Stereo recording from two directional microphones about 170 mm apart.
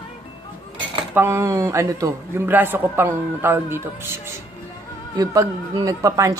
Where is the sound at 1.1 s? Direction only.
15° right (ahead or behind).